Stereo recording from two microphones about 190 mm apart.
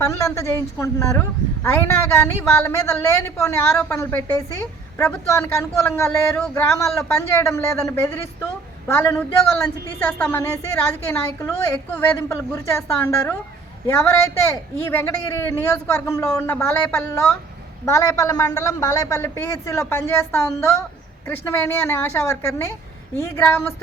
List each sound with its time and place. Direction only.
0.0 s a woman's voice: 15° left (ahead or behind)
13.8 s a woman's voice: 15° left (ahead or behind)